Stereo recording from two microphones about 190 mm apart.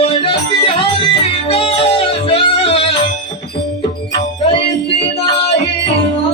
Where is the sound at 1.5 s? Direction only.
30° left (ahead or behind).